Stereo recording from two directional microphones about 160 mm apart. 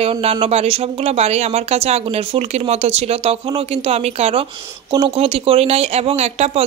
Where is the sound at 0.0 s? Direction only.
40° right (ahead or behind).